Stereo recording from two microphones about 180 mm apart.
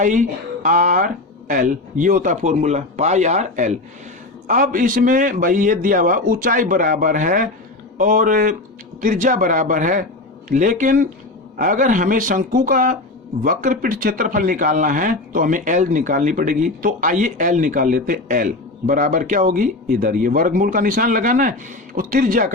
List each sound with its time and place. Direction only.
0.0 s speech: 45° right (ahead or behind)